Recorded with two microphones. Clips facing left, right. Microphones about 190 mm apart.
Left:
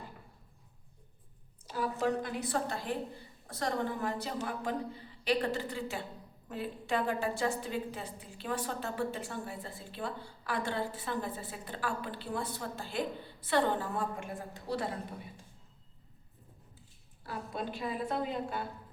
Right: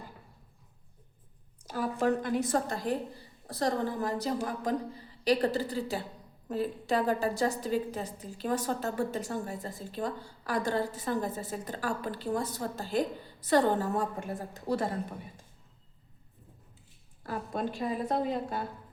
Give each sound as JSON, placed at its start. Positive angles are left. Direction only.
{"t": 1.6, "sound": "a woman's voice", "side_deg": -45}
{"t": 17.2, "sound": "a woman's voice", "side_deg": -45}